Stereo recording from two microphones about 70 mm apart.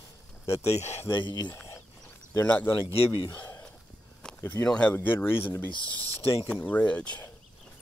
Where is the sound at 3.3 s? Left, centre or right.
Left.